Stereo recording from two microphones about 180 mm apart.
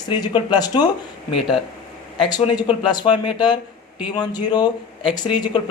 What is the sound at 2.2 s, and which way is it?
A man's voice, 25° left (ahead or behind).